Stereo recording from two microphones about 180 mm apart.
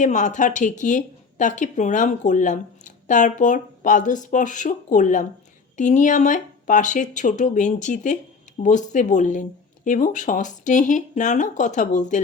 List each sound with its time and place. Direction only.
0.0 s speech: 45° left (ahead or behind)